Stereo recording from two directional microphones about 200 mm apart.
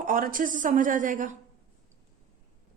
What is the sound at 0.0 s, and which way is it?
A woman's voice, 45° right (ahead or behind).